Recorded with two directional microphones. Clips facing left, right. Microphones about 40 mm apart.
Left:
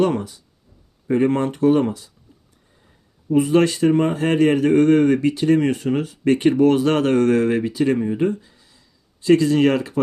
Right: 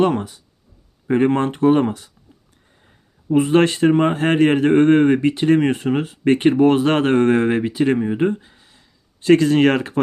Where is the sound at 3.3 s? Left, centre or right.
Right.